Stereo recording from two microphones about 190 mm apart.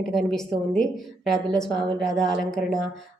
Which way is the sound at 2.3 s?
45° left (ahead or behind).